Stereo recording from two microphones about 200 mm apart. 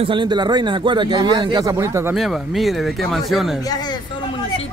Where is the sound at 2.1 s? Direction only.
Centre (ahead or behind).